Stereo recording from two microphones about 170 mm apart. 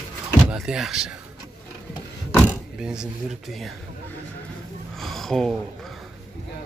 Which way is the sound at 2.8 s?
5° right (ahead or behind).